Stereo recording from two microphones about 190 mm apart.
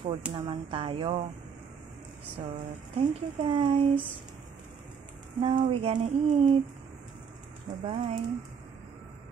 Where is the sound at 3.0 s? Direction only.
30° right (ahead or behind).